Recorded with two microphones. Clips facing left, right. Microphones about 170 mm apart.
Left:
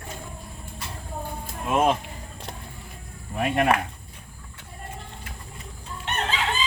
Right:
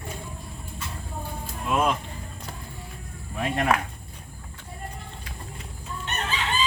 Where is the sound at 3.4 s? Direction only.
60° left (ahead or behind).